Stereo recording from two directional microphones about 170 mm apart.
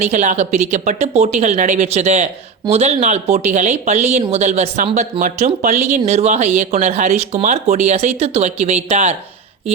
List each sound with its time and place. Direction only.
0.0 s speech: 45° right (ahead or behind)